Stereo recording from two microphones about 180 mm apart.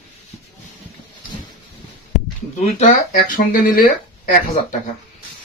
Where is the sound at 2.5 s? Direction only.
45° left (ahead or behind).